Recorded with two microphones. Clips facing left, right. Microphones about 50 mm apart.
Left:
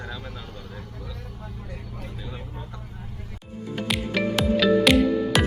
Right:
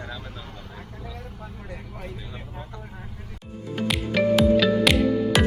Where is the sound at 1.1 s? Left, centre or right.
Right.